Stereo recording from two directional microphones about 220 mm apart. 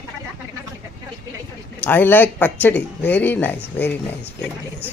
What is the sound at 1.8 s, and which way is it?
Speech, 10° left (ahead or behind).